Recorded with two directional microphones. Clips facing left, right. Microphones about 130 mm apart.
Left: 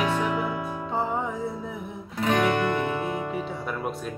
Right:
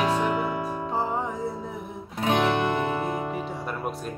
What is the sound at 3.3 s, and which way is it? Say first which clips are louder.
Music: left 1 dB; centre (ahead or behind).